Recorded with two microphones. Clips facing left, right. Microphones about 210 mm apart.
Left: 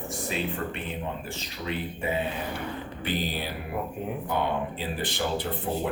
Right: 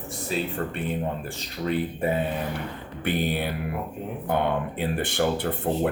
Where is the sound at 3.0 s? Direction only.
60° right (ahead or behind).